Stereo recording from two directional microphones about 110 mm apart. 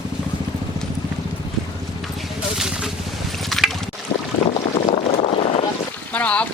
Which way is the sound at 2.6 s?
5° right (ahead or behind).